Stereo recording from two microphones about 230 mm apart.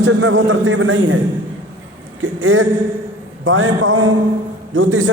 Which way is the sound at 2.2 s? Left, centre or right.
Right.